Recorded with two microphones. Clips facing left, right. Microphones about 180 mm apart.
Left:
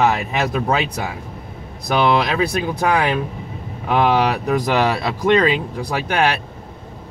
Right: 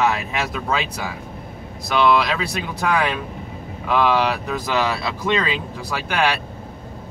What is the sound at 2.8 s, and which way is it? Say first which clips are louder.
Speech: left 2 dB; 35° left (ahead or behind).